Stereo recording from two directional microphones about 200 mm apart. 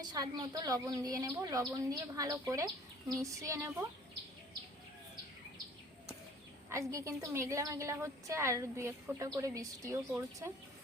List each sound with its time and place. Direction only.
0.0 s a woman's voice: 20° right (ahead or behind)
6.7 s a woman's voice: 15° right (ahead or behind)